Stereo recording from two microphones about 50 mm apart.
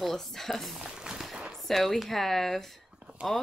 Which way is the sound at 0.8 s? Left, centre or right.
Centre.